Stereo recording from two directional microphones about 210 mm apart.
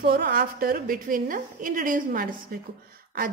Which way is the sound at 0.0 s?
45° right (ahead or behind).